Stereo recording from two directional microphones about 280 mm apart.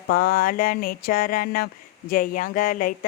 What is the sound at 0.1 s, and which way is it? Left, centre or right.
Speech, left.